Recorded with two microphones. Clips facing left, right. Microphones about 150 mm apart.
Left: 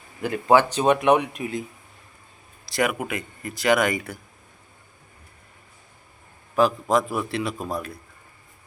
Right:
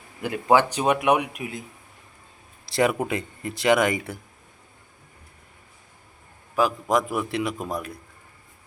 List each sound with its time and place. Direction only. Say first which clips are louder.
0.2 s speech: left 1 dB; 15° right (ahead or behind)
2.7 s a man's voice: right 2 dB; 25° right (ahead or behind)
6.6 s speech: left 2 dB; 15° right (ahead or behind)